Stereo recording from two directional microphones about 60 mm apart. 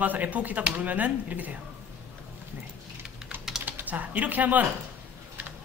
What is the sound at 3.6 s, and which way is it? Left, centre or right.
Speech, right.